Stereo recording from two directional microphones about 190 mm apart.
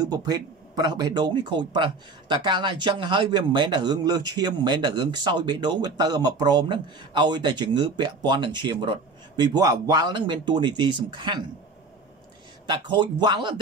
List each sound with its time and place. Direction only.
0.0 s speech: 20° right (ahead or behind)
12.6 s speech: 25° right (ahead or behind)